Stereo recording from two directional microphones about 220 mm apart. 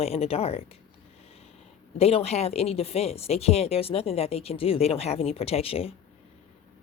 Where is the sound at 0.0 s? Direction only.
25° left (ahead or behind).